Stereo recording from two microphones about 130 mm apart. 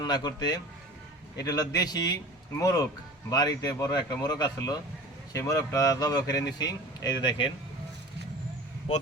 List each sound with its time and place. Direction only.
0.0 s speech: 35° left (ahead or behind)